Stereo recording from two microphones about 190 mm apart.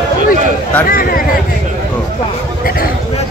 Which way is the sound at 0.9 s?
50° left (ahead or behind).